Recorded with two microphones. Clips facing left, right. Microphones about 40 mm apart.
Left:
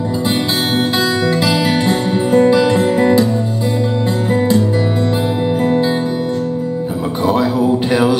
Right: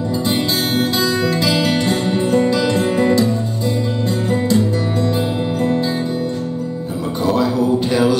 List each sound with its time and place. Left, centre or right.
0.9 s music: left
1.5 s music: centre
5.6 s music: left
7.2 s mantra: left